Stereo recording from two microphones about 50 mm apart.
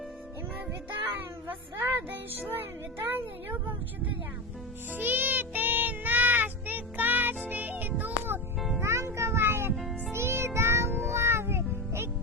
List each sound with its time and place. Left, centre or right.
2.0 s speech: right
4.9 s child singing: right
7.4 s music: right
8.8 s music: right